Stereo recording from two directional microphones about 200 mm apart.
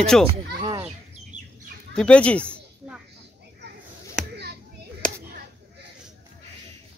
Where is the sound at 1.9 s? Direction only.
5° left (ahead or behind).